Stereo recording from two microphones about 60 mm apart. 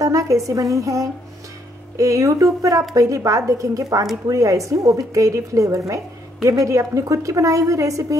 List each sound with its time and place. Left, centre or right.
0.0 s a woman's voice: right